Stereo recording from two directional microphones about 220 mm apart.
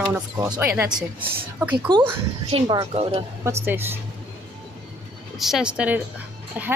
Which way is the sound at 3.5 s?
10° right (ahead or behind).